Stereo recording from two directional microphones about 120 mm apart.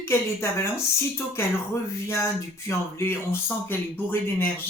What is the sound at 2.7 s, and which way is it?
Speech, 20° left (ahead or behind).